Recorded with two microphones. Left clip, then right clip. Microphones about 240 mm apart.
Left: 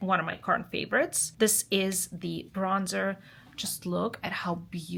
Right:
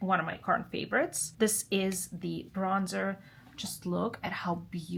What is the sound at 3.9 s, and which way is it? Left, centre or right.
Speech, left.